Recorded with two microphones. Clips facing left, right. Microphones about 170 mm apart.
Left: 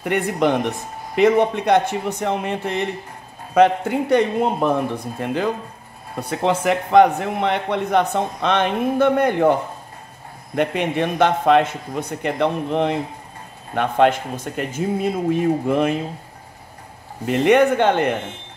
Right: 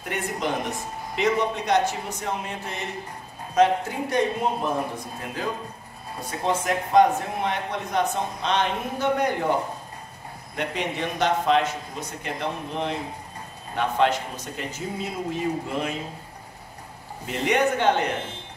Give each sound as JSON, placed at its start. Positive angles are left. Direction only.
{"t": 0.1, "sound": "speech", "side_deg": 60}
{"t": 10.5, "sound": "speech", "side_deg": 60}
{"t": 17.3, "sound": "speech", "side_deg": 60}